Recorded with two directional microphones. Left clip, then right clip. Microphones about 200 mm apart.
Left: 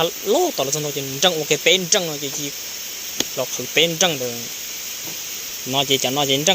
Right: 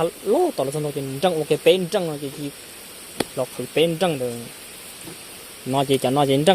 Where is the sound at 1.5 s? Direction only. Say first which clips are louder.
Left 1 dB; 25° right (ahead or behind).